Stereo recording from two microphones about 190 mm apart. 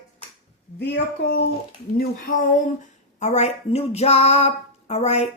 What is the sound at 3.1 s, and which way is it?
Speech, 35° left (ahead or behind).